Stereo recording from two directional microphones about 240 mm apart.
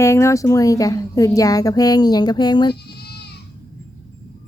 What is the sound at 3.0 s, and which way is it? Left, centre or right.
Goat, left.